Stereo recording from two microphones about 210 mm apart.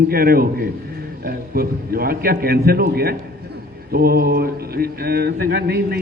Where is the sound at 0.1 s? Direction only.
45° right (ahead or behind).